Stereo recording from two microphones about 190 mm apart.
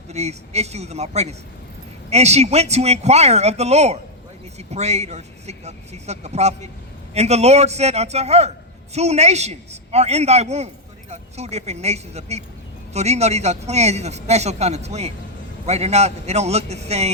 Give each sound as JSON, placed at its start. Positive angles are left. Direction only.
{"t": 0.1, "sound": "a man's voice", "side_deg": -35}